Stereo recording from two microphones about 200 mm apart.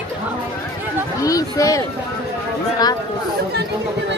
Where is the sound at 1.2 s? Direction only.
15° left (ahead or behind).